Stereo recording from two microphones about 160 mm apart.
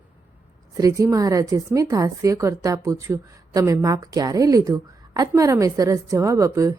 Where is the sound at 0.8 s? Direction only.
20° right (ahead or behind).